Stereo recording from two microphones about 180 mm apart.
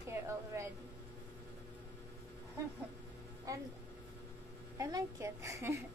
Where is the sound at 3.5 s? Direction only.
20° right (ahead or behind).